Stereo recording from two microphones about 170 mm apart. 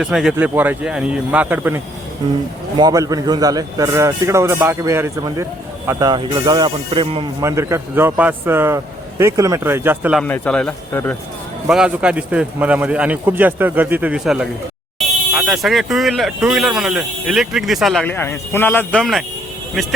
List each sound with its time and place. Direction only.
0.0 s a man's voice: 5° right (ahead or behind)
2.7 s a man's voice: 20° right (ahead or behind)
7.4 s a man's voice: 15° right (ahead or behind)
10.2 s a man's voice: 10° left (ahead or behind)
11.7 s a man's voice: 5° right (ahead or behind)
18.1 s a man's voice: 15° left (ahead or behind)